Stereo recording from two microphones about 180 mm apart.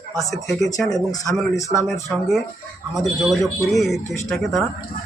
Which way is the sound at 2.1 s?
Centre (ahead or behind).